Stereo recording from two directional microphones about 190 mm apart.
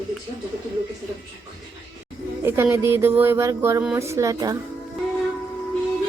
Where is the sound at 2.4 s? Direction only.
10° right (ahead or behind).